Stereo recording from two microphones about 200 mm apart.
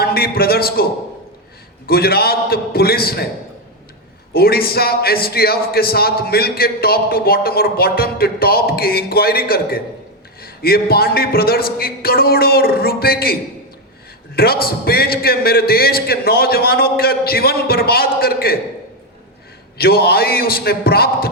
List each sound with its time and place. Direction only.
0.0 s a man's voice: 50° left (ahead or behind)
1.9 s a man's voice: 50° left (ahead or behind)
4.4 s a man's voice: 50° left (ahead or behind)
14.3 s a man's voice: 50° left (ahead or behind)
19.8 s a man's voice: 50° left (ahead or behind)